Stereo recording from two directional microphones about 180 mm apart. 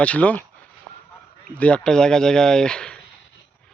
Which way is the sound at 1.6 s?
5° left (ahead or behind).